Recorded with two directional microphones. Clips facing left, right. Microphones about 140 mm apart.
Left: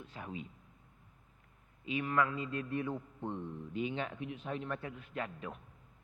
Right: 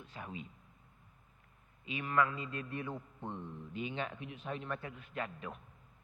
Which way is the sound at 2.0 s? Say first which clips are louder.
Right 1 dB; 25° left (ahead or behind).